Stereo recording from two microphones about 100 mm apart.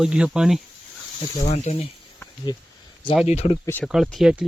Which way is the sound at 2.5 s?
40° left (ahead or behind).